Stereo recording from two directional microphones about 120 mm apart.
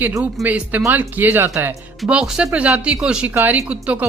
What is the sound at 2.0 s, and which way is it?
Speech, 5° right (ahead or behind).